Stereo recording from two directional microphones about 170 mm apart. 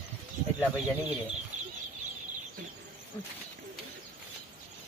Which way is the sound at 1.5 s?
45° right (ahead or behind).